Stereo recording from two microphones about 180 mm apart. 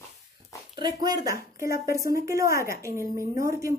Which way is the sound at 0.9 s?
20° right (ahead or behind).